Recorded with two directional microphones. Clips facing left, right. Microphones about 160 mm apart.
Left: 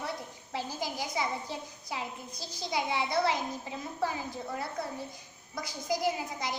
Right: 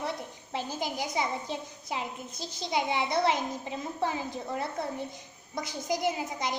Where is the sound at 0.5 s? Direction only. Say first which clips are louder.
Right 2 dB; 20° right (ahead or behind).